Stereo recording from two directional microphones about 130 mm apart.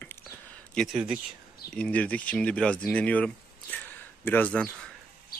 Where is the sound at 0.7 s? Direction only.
5° left (ahead or behind).